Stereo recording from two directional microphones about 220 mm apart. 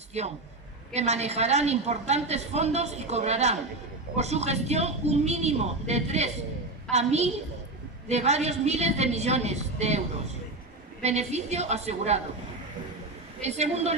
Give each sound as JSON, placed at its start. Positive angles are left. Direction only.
{"t": 0.1, "sound": "a man's voice", "side_deg": -30}
{"t": 11.0, "sound": "a woman's voice", "side_deg": -30}
{"t": 13.4, "sound": "a woman's voice", "side_deg": -30}